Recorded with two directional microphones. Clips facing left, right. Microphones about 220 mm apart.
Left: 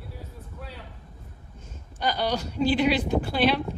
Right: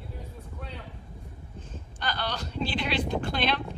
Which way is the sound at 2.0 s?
10° left (ahead or behind).